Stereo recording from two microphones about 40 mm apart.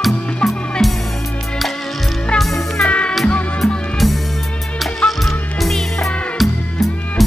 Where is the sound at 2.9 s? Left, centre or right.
Left.